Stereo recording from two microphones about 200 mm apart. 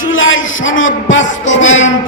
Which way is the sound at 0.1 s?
75° left (ahead or behind).